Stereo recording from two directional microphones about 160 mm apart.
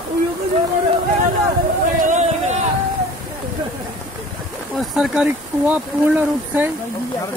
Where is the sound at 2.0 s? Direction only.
45° right (ahead or behind).